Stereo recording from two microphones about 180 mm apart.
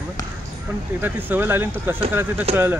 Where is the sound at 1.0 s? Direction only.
10° right (ahead or behind).